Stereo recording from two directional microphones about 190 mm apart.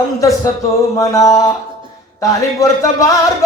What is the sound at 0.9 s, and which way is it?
Speech, 15° left (ahead or behind).